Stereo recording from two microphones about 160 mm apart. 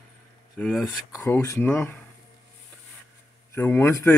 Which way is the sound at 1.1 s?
20° left (ahead or behind).